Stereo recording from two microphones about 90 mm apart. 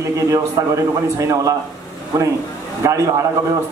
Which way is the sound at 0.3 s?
35° right (ahead or behind).